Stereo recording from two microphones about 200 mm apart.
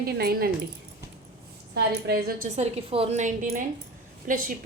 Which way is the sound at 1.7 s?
55° right (ahead or behind).